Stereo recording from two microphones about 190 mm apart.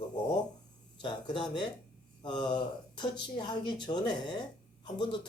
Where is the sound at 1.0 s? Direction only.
25° left (ahead or behind).